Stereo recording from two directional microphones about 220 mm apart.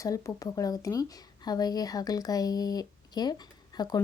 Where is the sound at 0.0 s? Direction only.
15° left (ahead or behind).